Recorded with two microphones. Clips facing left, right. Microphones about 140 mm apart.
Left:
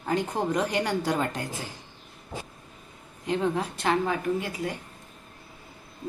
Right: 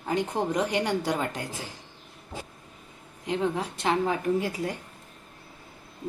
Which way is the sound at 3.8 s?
20° right (ahead or behind).